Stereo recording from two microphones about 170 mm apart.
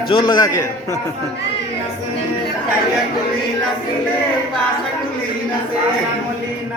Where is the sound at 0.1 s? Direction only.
25° left (ahead or behind).